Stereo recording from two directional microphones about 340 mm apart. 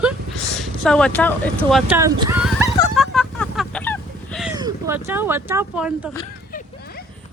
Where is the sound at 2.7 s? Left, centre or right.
Centre.